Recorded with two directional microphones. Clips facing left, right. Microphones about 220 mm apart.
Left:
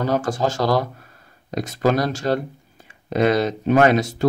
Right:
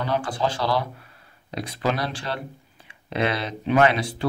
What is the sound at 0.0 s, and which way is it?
Speech, 45° left (ahead or behind).